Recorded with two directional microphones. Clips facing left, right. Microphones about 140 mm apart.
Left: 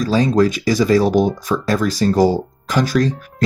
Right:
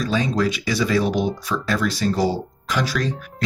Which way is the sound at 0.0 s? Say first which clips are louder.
Left 6 dB; 40° left (ahead or behind).